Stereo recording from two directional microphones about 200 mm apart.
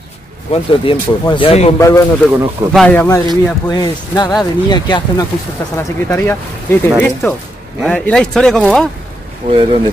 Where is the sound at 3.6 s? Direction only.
20° left (ahead or behind); by 8.6 s 5° left (ahead or behind).